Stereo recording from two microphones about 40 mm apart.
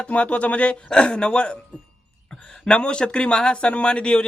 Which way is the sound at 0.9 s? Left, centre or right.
Left.